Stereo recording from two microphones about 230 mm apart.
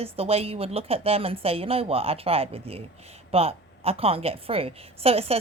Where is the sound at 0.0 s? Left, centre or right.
Right.